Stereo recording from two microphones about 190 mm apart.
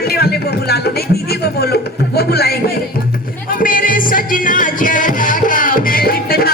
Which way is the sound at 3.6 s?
45° left (ahead or behind).